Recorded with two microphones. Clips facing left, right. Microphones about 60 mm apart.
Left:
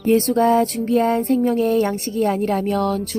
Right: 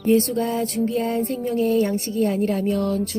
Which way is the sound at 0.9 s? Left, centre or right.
Left.